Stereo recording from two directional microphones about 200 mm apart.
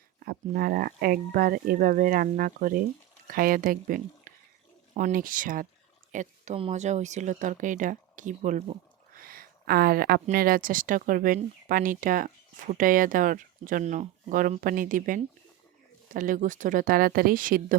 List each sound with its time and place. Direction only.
0.2 s speech: 50° right (ahead or behind)
9.1 s a sound: 45° right (ahead or behind)
10.2 s speech: 45° right (ahead or behind)